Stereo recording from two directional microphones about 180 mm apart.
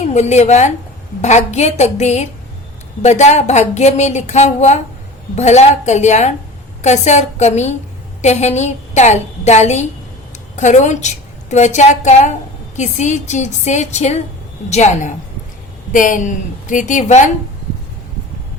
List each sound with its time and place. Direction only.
0.0 s a woman's voice: 40° left (ahead or behind)